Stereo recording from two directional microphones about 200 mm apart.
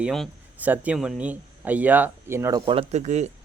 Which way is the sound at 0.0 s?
Centre (ahead or behind).